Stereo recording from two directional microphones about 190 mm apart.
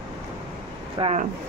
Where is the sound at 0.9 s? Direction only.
30° right (ahead or behind).